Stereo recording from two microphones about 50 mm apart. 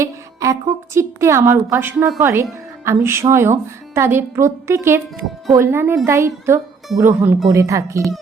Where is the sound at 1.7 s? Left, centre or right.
Right.